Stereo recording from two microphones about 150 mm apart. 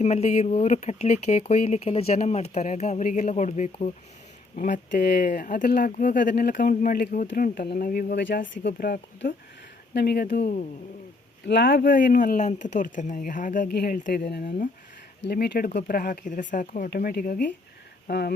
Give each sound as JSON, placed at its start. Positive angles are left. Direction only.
{"t": 0.0, "sound": "speech", "side_deg": 45}
{"t": 4.5, "sound": "speech", "side_deg": 60}
{"t": 11.4, "sound": "speech", "side_deg": 75}
{"t": 18.1, "sound": "speech", "side_deg": 90}